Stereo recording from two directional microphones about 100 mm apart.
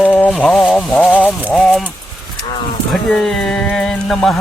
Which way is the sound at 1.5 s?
Centre (ahead or behind).